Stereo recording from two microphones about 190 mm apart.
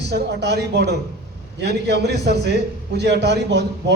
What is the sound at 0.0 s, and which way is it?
A man's voice, 60° right (ahead or behind).